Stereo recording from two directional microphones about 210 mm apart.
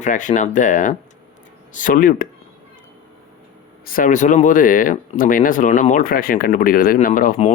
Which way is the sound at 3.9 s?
40° left (ahead or behind).